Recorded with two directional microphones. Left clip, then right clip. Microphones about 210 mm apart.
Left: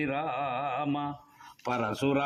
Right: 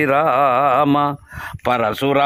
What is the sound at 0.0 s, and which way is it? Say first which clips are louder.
A man's voice: right 17 dB; 50° right (ahead or behind).